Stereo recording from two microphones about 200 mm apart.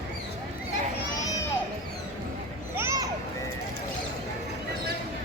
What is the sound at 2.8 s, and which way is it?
Children playing, 15° right (ahead or behind).